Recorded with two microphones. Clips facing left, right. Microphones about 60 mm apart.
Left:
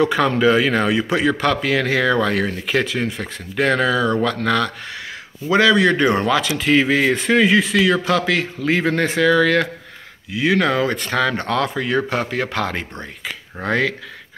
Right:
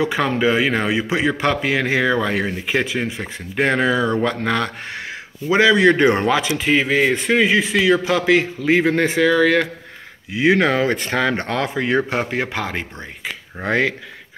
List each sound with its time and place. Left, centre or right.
0.0 s a man's voice: centre
10.3 s speech: right